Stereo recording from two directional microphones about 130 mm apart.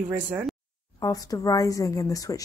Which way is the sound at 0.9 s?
30° left (ahead or behind).